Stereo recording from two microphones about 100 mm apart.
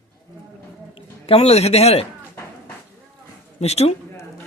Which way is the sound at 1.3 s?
90° left.